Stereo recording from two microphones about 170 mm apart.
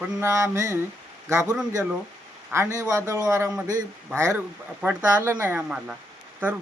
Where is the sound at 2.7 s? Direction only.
20° right (ahead or behind).